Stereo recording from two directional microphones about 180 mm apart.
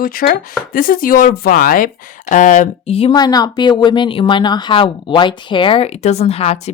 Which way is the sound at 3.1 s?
20° left (ahead or behind).